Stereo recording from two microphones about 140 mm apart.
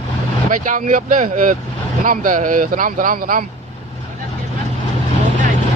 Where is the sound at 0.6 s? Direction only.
70° right (ahead or behind); by 3.4 s 90° right.